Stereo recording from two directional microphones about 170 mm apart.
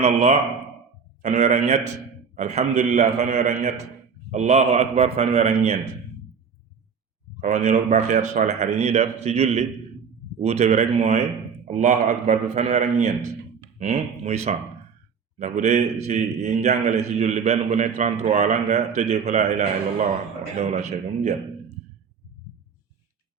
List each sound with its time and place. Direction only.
0.0 s a man's voice: 40° right (ahead or behind)
7.4 s a man's voice: 45° right (ahead or behind)